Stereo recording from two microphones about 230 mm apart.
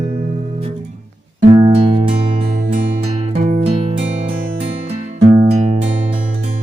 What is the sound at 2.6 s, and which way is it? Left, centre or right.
Music, right.